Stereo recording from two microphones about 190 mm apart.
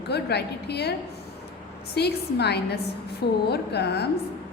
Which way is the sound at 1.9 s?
60° left (ahead or behind).